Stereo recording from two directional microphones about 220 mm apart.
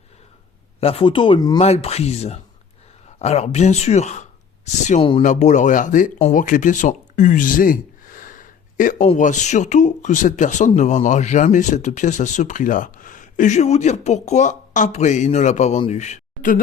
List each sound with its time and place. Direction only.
0.8 s speech: 25° left (ahead or behind)